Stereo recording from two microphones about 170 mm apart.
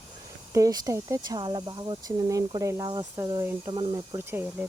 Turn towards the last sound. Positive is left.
turn(degrees=-10)  # may be behind; listen again after turning